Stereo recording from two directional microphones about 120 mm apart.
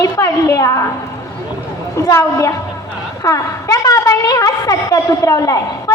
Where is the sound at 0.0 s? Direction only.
25° left (ahead or behind).